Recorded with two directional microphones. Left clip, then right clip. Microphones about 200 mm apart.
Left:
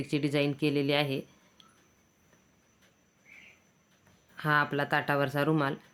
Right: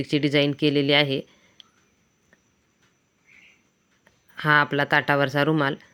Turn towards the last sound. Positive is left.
turn(degrees=-25)  # may be behind; listen again after turning